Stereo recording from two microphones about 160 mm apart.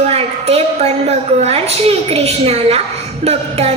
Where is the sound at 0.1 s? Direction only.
40° right (ahead or behind).